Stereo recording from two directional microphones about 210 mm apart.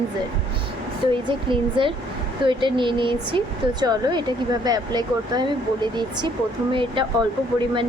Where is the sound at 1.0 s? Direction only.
25° right (ahead or behind).